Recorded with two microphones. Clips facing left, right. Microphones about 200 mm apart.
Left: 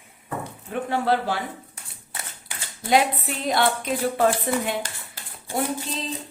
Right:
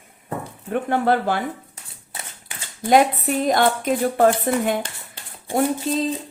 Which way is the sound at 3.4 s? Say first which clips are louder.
Right 3 dB; 45° right (ahead or behind).